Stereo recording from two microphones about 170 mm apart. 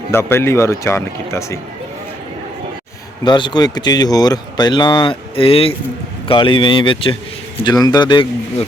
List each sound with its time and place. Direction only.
0.1 s speech: 15° left (ahead or behind)
3.2 s a man's voice: 25° left (ahead or behind)